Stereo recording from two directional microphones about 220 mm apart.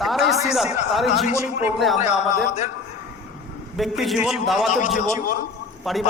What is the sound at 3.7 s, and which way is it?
Speech, centre (ahead or behind).